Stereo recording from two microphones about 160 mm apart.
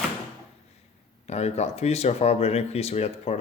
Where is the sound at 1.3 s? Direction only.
45° left (ahead or behind).